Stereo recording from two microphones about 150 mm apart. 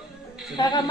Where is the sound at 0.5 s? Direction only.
30° left (ahead or behind).